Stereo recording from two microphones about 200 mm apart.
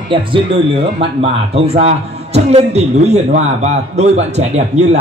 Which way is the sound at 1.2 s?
30° right (ahead or behind).